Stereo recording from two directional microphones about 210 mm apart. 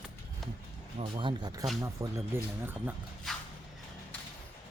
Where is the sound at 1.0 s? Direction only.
25° right (ahead or behind).